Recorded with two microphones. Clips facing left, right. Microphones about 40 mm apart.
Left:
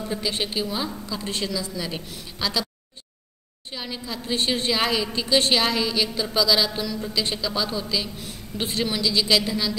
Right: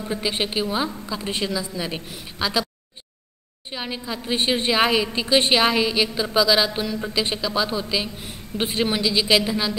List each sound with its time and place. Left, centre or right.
0.0 s a woman's voice: right
3.7 s a woman's voice: right